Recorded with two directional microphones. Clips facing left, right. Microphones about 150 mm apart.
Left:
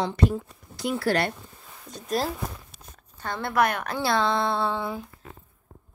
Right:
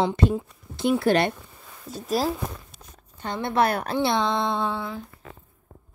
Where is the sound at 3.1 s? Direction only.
20° right (ahead or behind).